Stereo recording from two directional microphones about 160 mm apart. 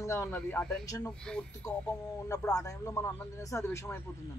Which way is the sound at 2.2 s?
20° left (ahead or behind).